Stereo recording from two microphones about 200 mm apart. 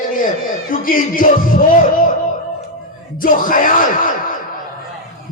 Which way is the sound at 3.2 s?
45° left (ahead or behind).